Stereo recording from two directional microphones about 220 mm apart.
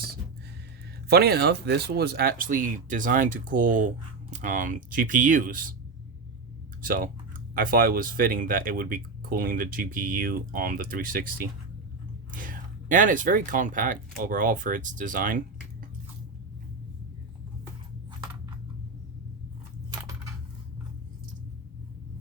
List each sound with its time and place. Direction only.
1.0 s speech: 45° right (ahead or behind)
6.8 s speech: 40° right (ahead or behind)